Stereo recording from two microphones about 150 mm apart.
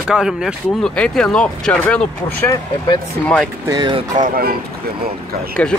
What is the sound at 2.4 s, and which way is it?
Speech, 25° left (ahead or behind).